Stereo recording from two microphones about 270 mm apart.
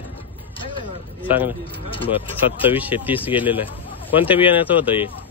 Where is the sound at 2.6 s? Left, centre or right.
Centre.